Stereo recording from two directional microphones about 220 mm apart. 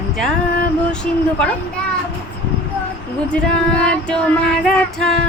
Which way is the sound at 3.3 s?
5° left (ahead or behind).